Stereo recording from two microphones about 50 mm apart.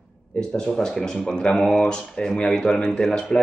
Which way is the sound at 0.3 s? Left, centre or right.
Left.